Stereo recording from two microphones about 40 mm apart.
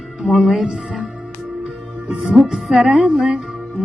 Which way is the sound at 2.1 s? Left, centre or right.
Right.